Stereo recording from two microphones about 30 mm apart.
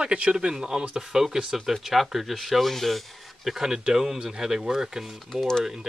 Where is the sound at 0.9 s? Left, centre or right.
Centre.